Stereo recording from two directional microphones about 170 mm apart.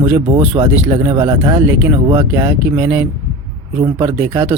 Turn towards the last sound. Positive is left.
turn(degrees=-10)  # may be behind; listen again after turning